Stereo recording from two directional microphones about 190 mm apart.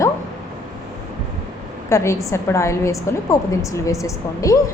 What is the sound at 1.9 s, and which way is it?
A woman's voice, 15° left (ahead or behind).